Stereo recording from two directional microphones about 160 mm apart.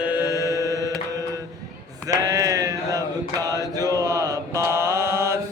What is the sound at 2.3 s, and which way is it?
Chant, 20° right (ahead or behind).